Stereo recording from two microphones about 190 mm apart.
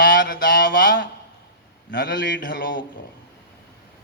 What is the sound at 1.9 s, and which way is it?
Speech, 65° left (ahead or behind).